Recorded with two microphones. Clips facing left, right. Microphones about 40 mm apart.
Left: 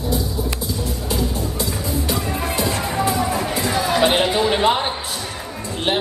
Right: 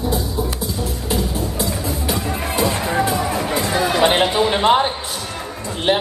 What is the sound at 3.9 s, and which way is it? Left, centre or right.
Chatter, right.